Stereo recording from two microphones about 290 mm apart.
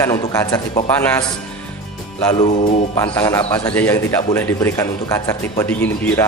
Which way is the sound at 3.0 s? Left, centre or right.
Centre.